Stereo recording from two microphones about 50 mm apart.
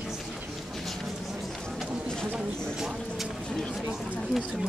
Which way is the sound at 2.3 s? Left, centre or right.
Centre.